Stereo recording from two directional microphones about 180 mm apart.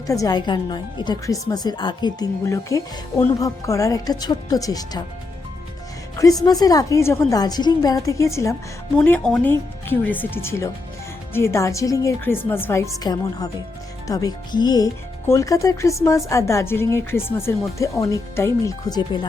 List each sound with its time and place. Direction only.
0.1 s speech: 20° left (ahead or behind)
6.4 s speech: 20° left (ahead or behind)
9.0 s speech: 5° left (ahead or behind); by 19.2 s 25° left (ahead or behind)